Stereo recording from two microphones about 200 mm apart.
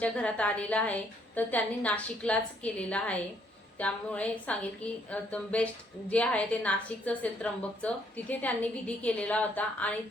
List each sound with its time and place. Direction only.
0.0 s a woman's voice: 5° left (ahead or behind)